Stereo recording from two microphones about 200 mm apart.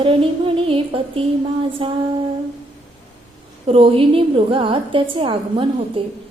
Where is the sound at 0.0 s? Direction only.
25° right (ahead or behind).